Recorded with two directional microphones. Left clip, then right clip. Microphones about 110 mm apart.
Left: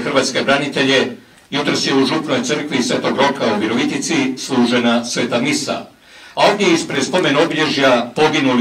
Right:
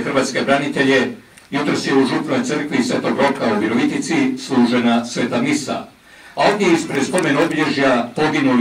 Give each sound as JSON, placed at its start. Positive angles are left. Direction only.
{"t": 0.0, "sound": "speech", "side_deg": 30}